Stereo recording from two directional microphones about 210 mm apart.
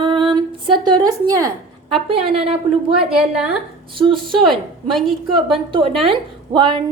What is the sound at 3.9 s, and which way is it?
A woman's voice, 25° right (ahead or behind).